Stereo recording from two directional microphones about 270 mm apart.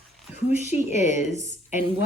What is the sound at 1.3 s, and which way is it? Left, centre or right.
Speech, right.